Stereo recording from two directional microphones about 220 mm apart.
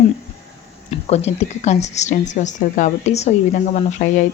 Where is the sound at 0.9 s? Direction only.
30° left (ahead or behind).